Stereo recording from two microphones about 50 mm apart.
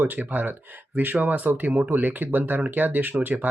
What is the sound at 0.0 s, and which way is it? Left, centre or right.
Speech, right.